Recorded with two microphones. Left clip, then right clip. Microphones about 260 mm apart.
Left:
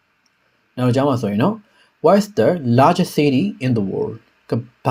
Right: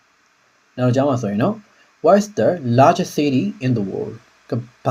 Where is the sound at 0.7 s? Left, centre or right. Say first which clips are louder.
Even; left.